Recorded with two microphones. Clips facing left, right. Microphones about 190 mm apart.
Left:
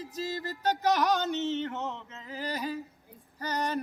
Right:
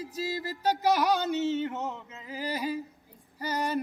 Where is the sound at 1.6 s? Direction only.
15° right (ahead or behind).